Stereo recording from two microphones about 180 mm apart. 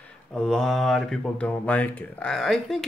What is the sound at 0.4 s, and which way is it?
Speech, 5° left (ahead or behind).